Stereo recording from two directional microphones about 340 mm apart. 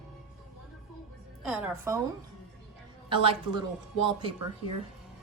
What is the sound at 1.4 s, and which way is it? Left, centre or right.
Speech, centre.